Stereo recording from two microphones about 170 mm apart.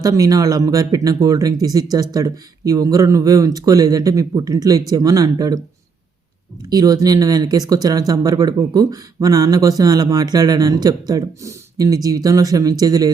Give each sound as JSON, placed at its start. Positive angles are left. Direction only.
{"t": 0.0, "sound": "speech", "side_deg": -20}
{"t": 6.6, "sound": "speech", "side_deg": -20}